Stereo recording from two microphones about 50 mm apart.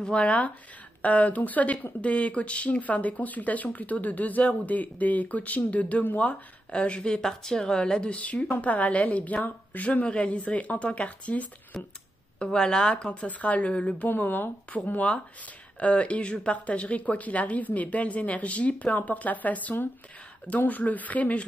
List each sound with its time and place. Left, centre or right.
0.0 s speech: left
7.2 s speech: centre; by 11.8 s left
12.4 s speech: centre
14.0 s speech: left
15.8 s speech: left